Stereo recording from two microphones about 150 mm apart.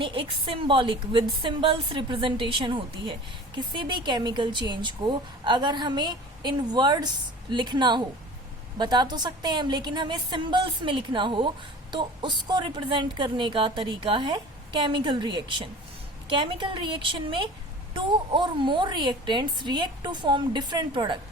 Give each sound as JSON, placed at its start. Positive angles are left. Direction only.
{"t": 0.0, "sound": "a woman's voice", "side_deg": -35}